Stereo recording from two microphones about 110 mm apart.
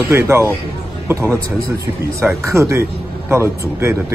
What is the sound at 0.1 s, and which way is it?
Speech, 25° right (ahead or behind).